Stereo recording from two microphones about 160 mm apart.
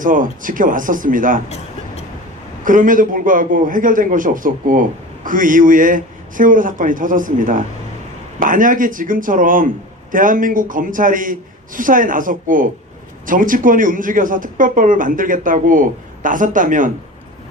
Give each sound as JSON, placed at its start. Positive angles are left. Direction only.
{"t": 0.0, "sound": "speech", "side_deg": -55}
{"t": 1.5, "sound": "a sound", "side_deg": 40}
{"t": 2.6, "sound": "speech", "side_deg": -55}